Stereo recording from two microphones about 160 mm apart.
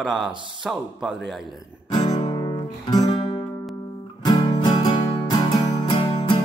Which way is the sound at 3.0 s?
40° left (ahead or behind).